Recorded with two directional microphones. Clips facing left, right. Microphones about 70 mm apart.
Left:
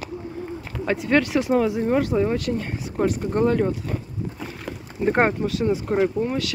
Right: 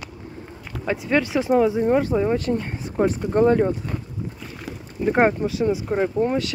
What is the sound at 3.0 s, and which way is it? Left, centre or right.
Speech, right.